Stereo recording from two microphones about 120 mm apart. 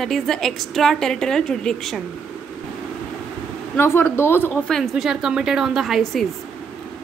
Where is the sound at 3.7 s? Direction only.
20° left (ahead or behind).